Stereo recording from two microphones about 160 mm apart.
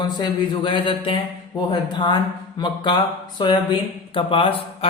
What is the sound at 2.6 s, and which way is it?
A man's voice, 30° left (ahead or behind).